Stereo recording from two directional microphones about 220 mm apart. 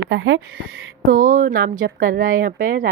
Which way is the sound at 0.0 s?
55° right (ahead or behind).